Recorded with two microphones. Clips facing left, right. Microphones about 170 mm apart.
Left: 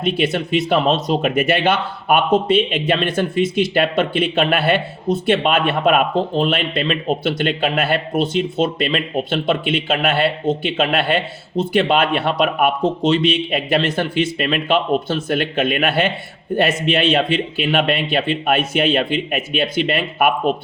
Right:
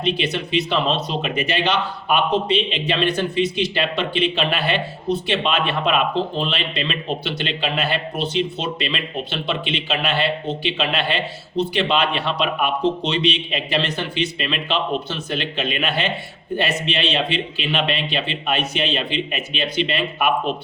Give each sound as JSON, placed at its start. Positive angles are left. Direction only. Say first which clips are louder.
{"t": 0.0, "sound": "speech", "louder": "left 3 dB", "side_deg": 50}